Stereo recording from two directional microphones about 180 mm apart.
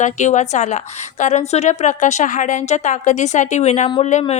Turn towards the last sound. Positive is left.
turn(degrees=35)  # may be behind; listen again after turning